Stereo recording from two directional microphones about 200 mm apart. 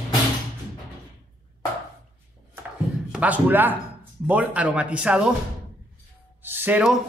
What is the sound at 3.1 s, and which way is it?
Speech, 5° right (ahead or behind).